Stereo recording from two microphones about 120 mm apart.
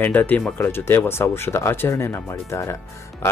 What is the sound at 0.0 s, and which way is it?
Speech, 15° left (ahead or behind).